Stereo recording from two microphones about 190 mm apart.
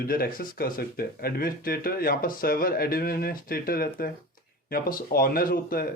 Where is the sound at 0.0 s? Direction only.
50° left (ahead or behind).